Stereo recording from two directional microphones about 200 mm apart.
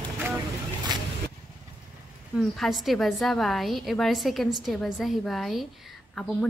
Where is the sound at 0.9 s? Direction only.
20° right (ahead or behind).